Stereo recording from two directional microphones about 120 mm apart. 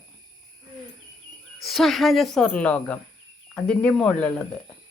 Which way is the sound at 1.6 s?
Centre (ahead or behind).